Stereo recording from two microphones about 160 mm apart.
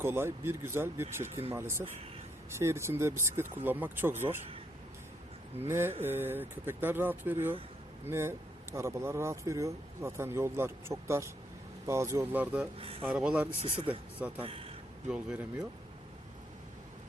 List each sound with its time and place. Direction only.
0.0 s speech: 15° right (ahead or behind)
5.5 s speech: 15° right (ahead or behind)
12.8 s speech: 35° right (ahead or behind)
13.1 s speech: 5° right (ahead or behind)
13.6 s speech: 35° right (ahead or behind)
15.0 s speech: 5° right (ahead or behind)